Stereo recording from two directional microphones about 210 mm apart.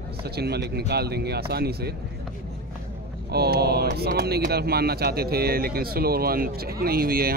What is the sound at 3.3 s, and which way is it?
Speech, 50° right (ahead or behind).